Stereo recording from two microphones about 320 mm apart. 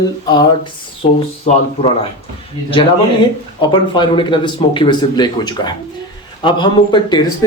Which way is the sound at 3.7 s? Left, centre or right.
Centre.